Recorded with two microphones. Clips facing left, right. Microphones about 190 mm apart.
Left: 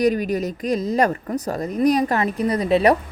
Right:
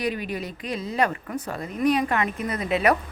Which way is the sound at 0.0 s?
45° left (ahead or behind).